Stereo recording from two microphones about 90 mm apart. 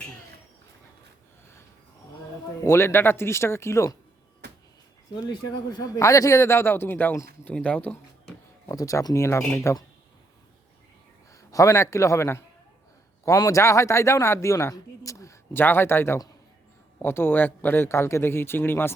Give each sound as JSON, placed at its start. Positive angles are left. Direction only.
{"t": 2.6, "sound": "a man's voice", "side_deg": 30}
{"t": 5.7, "sound": "a man's voice", "side_deg": 40}
{"t": 8.7, "sound": "a man's voice", "side_deg": 40}
{"t": 11.3, "sound": "a man's voice", "side_deg": 35}
{"t": 15.5, "sound": "a man's voice", "side_deg": 25}